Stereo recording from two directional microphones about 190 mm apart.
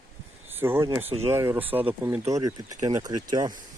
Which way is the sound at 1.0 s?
35° right (ahead or behind).